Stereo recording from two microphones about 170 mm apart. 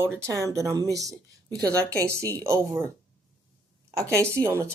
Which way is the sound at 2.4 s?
15° right (ahead or behind).